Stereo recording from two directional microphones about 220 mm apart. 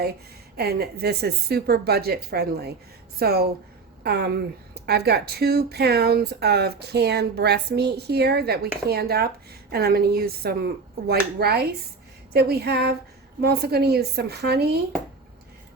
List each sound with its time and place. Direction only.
0.0 s a woman's voice: 45° right (ahead or behind)